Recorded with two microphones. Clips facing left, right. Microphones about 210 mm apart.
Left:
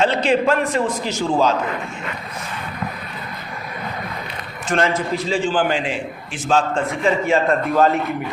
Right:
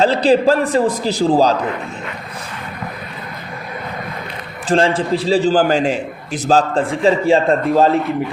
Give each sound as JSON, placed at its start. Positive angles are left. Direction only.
{"t": 0.0, "sound": "a man's voice", "side_deg": -35}
{"t": 4.7, "sound": "a man's voice", "side_deg": -30}